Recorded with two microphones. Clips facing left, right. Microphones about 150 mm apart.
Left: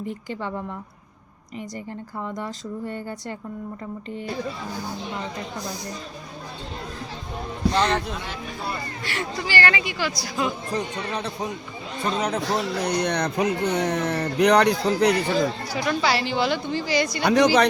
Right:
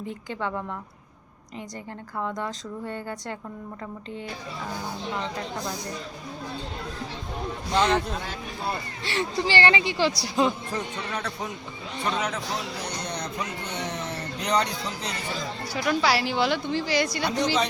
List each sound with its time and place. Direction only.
2.3 s speech: 10° left (ahead or behind)
7.7 s speech: 10° right (ahead or behind)
9.0 s speech: 25° right (ahead or behind)
10.7 s speech: 20° left (ahead or behind)
12.0 s speech: 35° left (ahead or behind)
12.5 s speech: 55° left (ahead or behind)
15.8 s a woman's voice: centre (ahead or behind)
17.2 s speech: 75° left (ahead or behind)